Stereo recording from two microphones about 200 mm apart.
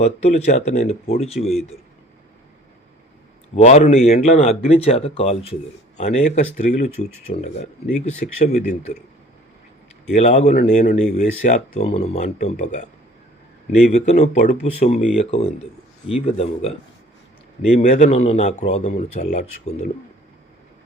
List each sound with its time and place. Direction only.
0.0 s speech: 35° left (ahead or behind)
1.4 s a man's voice: centre (ahead or behind)
3.5 s speech: 35° left (ahead or behind)
10.2 s speech: 35° left (ahead or behind)
13.9 s speech: 35° left (ahead or behind)
17.7 s speech: 30° left (ahead or behind)